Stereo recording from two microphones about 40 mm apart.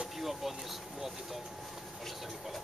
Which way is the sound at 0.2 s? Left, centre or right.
Centre.